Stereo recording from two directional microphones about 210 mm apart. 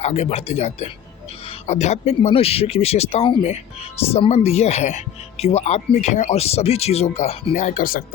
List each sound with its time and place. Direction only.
0.0 s a man's voice: 30° left (ahead or behind)